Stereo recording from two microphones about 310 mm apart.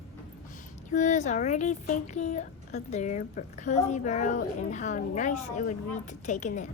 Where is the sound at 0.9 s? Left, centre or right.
Left.